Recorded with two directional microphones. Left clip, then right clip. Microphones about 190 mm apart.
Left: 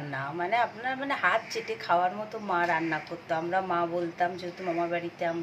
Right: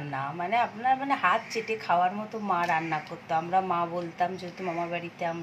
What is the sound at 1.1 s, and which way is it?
Speech, 20° left (ahead or behind).